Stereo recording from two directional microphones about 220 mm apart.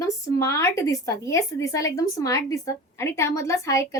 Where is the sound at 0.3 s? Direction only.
15° left (ahead or behind).